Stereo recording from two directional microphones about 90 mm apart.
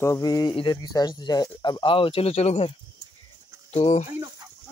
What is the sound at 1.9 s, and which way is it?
Speech, 90° left.